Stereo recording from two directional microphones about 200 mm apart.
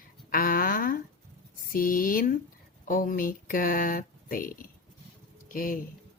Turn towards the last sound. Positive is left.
turn(degrees=45)  # may be behind; listen again after turning